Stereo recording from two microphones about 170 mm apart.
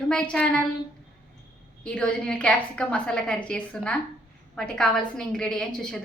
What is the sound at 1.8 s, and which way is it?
A woman's voice, 5° left (ahead or behind).